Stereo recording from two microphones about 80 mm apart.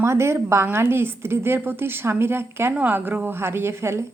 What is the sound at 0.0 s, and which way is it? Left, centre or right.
A woman's voice, right.